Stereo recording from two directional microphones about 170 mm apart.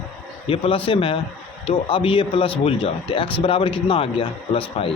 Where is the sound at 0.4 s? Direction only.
35° left (ahead or behind).